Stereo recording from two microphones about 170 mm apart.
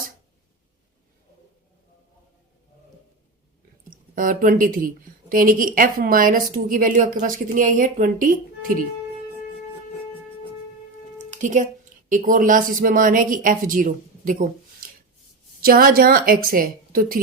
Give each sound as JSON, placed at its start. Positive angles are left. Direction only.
{"t": 3.8, "sound": "a woman's voice", "side_deg": -55}
{"t": 11.2, "sound": "a woman's voice", "side_deg": -45}